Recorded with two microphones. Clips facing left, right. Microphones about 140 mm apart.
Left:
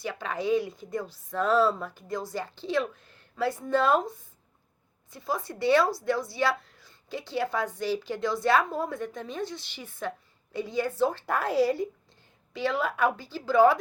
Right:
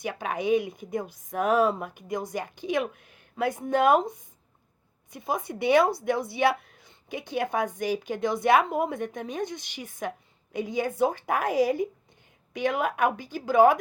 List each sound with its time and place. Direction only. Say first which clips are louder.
0.0 s a woman's voice: right 2 dB; 15° right (ahead or behind)